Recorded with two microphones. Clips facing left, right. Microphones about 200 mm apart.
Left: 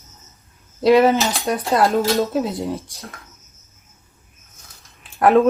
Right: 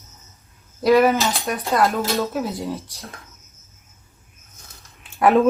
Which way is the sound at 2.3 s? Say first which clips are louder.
Left 3 dB; 15° left (ahead or behind).